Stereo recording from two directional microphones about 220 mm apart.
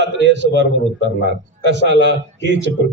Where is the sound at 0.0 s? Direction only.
55° right (ahead or behind).